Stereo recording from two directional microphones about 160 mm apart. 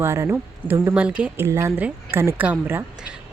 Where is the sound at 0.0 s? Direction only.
15° right (ahead or behind).